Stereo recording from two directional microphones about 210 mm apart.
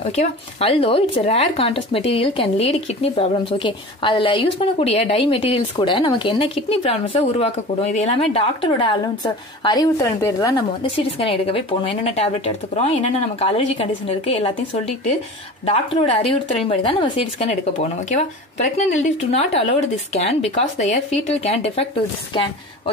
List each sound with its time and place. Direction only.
0.0 s speech: 30° left (ahead or behind)